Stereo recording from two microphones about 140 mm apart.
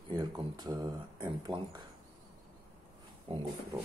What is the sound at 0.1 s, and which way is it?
Speech, 30° right (ahead or behind).